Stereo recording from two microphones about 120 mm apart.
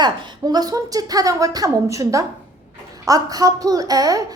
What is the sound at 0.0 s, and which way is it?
A woman's voice, 35° right (ahead or behind).